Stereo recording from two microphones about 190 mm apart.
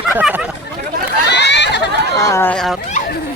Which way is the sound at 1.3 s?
65° left (ahead or behind).